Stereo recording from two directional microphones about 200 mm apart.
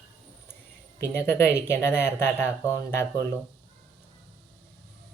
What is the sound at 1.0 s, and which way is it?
Speech, 10° left (ahead or behind).